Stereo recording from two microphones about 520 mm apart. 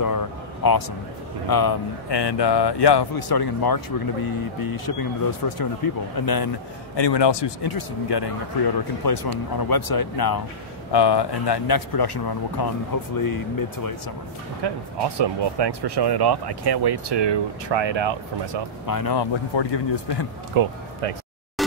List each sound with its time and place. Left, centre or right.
0.0 s vehicle: left
1.5 s a man's voice: left
7.0 s a man's voice: left
14.6 s speech: right
18.9 s a man's voice: left
20.5 s speech: right
21.0 s speech: right
21.6 s a sound: centre